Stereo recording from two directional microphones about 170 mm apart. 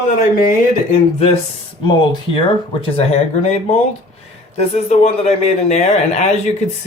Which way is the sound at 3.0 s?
40° left (ahead or behind).